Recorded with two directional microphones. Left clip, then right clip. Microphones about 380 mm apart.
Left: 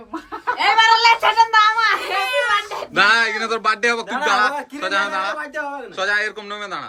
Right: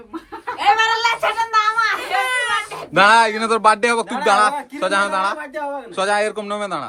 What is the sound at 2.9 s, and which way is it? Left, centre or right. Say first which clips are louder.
Speech: right 3 dB; centre.